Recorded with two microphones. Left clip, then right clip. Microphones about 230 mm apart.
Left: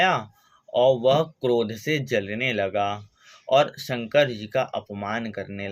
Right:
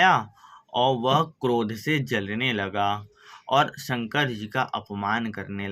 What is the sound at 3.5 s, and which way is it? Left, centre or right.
Speech, centre.